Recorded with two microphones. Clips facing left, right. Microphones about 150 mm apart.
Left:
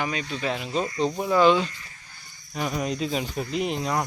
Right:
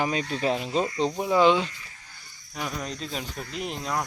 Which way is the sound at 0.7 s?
25° right (ahead or behind).